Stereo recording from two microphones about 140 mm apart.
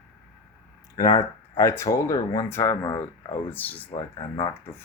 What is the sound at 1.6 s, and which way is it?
Speech, 20° left (ahead or behind).